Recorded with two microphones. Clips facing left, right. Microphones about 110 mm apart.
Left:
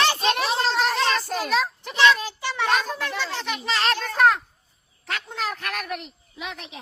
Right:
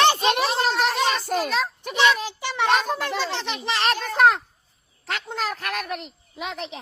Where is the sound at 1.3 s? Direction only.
Centre (ahead or behind).